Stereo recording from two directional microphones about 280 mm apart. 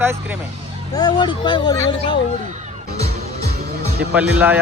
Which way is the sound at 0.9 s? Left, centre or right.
Centre.